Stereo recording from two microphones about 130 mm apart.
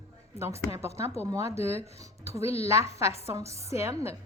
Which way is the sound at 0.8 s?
55° left (ahead or behind).